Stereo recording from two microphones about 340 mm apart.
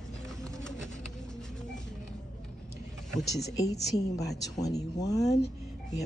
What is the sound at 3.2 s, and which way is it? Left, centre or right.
Speech, left.